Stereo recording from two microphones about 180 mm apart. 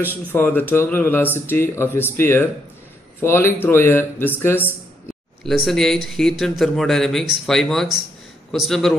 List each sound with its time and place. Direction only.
0.3 s speech: 10° left (ahead or behind)
5.4 s speech: centre (ahead or behind)